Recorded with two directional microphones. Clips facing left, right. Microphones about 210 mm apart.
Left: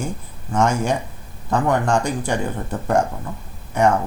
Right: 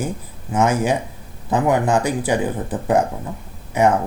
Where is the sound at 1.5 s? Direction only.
15° right (ahead or behind).